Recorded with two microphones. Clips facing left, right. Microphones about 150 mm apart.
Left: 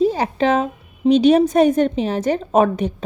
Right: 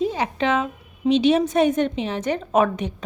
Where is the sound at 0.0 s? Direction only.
35° left (ahead or behind).